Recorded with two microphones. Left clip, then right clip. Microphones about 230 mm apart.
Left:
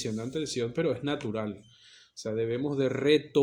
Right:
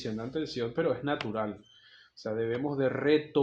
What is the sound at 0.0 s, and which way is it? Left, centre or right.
Speech, left.